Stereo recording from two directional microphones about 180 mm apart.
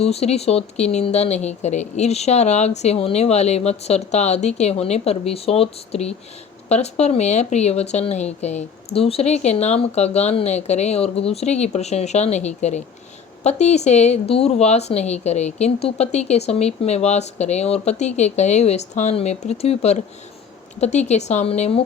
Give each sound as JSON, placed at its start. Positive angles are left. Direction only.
{"t": 0.0, "sound": "speech", "side_deg": 35}